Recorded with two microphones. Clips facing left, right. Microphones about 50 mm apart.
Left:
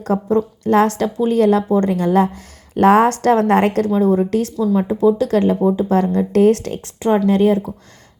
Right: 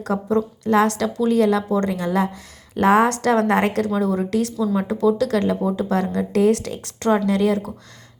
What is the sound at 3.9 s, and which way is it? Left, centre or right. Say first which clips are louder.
Speech: left 6 dB; left.